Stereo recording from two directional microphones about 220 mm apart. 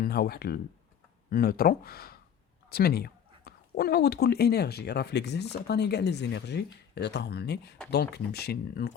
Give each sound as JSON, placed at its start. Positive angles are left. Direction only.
{"t": 0.0, "sound": "speech", "side_deg": 45}